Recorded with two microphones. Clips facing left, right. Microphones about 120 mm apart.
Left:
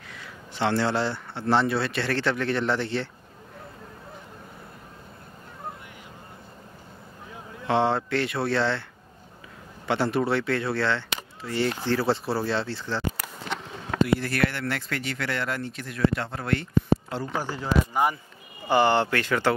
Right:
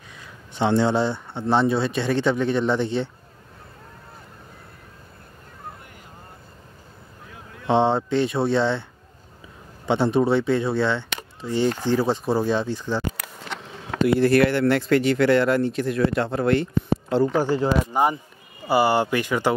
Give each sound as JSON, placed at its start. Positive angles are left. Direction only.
{"t": 0.1, "sound": "speech", "side_deg": -20}
{"t": 7.6, "sound": "speech", "side_deg": -20}
{"t": 9.8, "sound": "speech", "side_deg": -20}
{"t": 14.0, "sound": "speech", "side_deg": -25}
{"t": 17.1, "sound": "speech", "side_deg": -70}
{"t": 17.9, "sound": "speech", "side_deg": -25}
{"t": 18.7, "sound": "speech", "side_deg": -10}